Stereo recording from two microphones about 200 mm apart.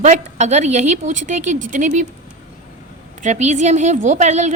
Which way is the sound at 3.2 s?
35° right (ahead or behind).